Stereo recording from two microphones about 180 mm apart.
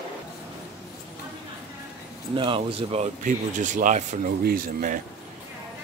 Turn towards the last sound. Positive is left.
turn(degrees=-50)  # may be behind; listen again after turning